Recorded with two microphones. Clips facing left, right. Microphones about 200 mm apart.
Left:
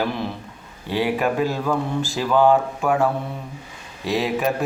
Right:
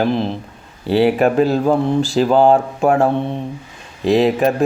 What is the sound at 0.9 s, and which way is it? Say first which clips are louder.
Speech: right 8 dB; 30° right (ahead or behind).